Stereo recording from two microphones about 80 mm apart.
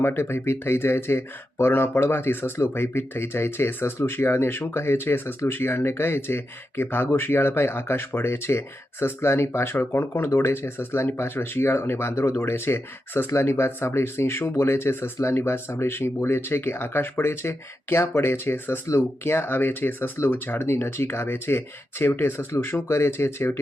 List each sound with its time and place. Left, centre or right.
0.0 s speech: left